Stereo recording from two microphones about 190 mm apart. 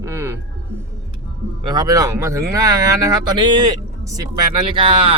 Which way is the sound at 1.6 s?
20° right (ahead or behind).